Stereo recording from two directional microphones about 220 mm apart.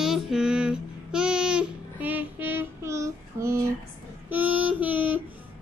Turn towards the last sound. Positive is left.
turn(degrees=-5)  # may be behind; listen again after turning